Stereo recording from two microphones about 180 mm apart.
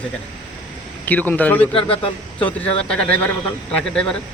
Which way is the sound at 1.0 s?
10° left (ahead or behind).